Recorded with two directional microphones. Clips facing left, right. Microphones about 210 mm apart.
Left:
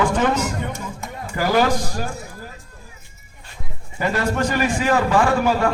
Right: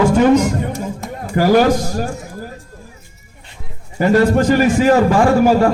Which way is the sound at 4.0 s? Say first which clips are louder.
Right 9 dB; 40° right (ahead or behind).